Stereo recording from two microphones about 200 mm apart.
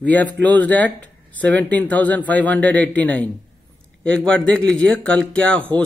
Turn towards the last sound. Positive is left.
turn(degrees=5)  # may be behind; listen again after turning